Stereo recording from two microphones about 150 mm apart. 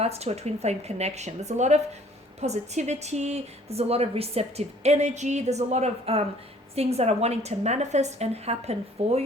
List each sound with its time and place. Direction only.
0.0 s a woman's voice: 45° right (ahead or behind)